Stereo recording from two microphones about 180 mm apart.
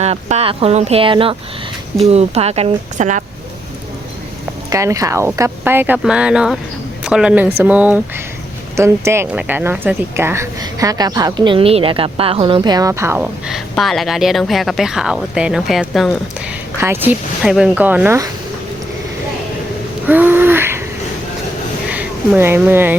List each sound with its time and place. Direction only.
0.0 s speech: 35° right (ahead or behind)
4.7 s a woman's voice: 15° right (ahead or behind)
20.1 s a sound: 10° right (ahead or behind)
21.8 s speech: 10° right (ahead or behind)